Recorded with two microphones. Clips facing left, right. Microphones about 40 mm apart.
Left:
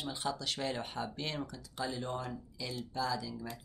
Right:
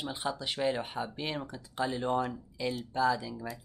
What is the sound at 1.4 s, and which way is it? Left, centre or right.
Speech, right.